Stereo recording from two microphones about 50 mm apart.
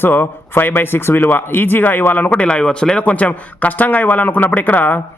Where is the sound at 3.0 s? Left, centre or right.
Left.